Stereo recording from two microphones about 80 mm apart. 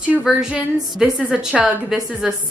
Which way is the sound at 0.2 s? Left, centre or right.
Centre.